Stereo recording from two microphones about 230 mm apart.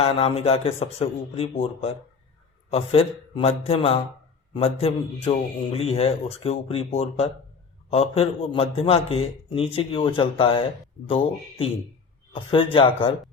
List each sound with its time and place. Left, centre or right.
0.0 s a man's voice: left